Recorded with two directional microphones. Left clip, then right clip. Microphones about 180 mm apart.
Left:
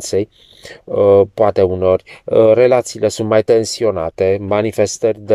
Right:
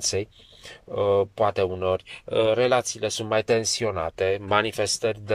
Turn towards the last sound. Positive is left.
turn(degrees=35)  # may be behind; listen again after turning